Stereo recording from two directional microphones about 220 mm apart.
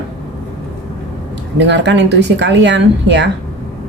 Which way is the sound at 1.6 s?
55° right (ahead or behind).